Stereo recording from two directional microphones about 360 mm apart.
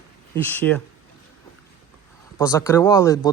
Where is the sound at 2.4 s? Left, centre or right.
Centre.